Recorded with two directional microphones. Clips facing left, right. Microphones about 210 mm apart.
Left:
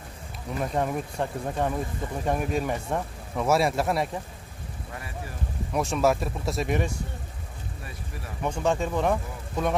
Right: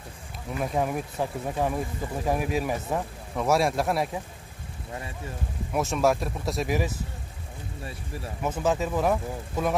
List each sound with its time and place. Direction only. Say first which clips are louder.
0.6 s speech: even; 5° right (ahead or behind)
4.9 s vehicle: right 2 dB; 25° right (ahead or behind)
5.7 s speech: even; centre (ahead or behind)
8.4 s speech: even; 5° right (ahead or behind)